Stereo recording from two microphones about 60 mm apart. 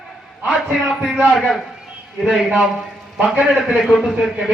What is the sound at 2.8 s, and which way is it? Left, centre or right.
A man's voice, centre.